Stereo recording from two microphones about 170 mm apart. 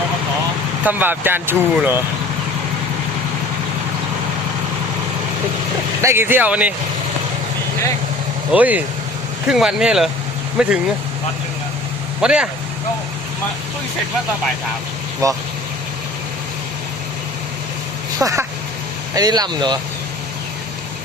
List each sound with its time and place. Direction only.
0.9 s speech: 10° right (ahead or behind)
6.0 s speech: 15° right (ahead or behind)
8.5 s speech: 10° right (ahead or behind)
12.2 s speech: 5° right (ahead or behind)
15.2 s speech: 20° right (ahead or behind)
18.2 s speech: 20° right (ahead or behind)